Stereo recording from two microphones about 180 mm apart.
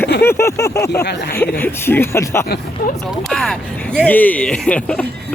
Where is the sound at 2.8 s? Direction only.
55° left (ahead or behind).